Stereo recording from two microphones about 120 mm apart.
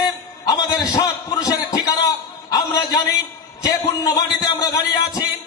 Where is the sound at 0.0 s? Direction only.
35° left (ahead or behind).